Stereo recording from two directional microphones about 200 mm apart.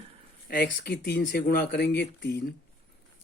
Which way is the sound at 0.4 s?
50° left (ahead or behind).